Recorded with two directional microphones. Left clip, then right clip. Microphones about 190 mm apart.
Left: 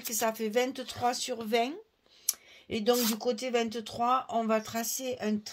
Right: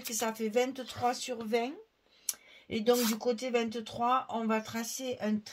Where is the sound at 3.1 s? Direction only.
45° left (ahead or behind).